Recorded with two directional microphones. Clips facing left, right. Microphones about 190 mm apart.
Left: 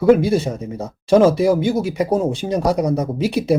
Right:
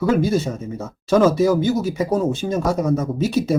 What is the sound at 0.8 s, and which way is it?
Speech, 30° left (ahead or behind).